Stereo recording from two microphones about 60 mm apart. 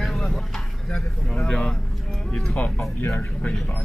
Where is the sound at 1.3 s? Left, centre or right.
Centre.